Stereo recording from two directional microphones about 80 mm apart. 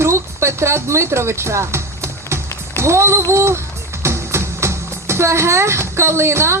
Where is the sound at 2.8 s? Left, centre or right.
Right.